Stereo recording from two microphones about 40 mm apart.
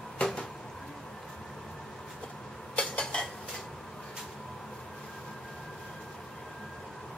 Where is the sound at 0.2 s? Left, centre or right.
Centre.